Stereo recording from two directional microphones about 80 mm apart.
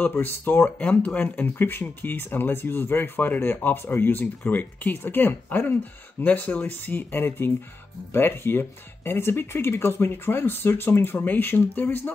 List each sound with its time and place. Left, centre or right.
0.0 s speech: left